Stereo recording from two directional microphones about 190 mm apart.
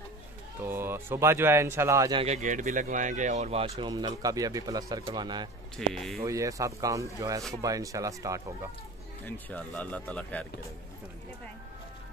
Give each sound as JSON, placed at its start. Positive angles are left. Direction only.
{"t": 0.6, "sound": "speech", "side_deg": -10}
{"t": 2.2, "sound": "speech", "side_deg": -40}
{"t": 3.7, "sound": "speech", "side_deg": -20}
{"t": 5.8, "sound": "speech", "side_deg": 0}
{"t": 6.2, "sound": "speech", "side_deg": -15}
{"t": 9.2, "sound": "speech", "side_deg": 5}